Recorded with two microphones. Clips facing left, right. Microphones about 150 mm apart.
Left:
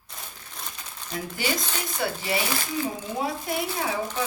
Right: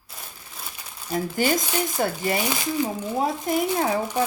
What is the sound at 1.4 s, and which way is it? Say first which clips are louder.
Speech: right 6 dB; 45° right (ahead or behind).